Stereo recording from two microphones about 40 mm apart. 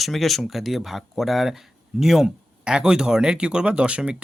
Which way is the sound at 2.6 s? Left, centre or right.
Centre.